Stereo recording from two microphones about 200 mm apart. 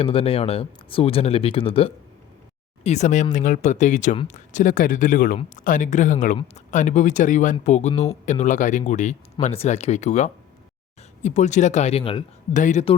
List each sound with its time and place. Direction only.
0.0 s speech: 30° left (ahead or behind)
12.5 s speech: 40° left (ahead or behind)